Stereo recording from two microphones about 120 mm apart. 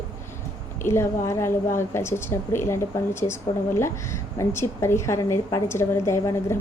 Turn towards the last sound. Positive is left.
turn(degrees=25)  # may be behind; listen again after turning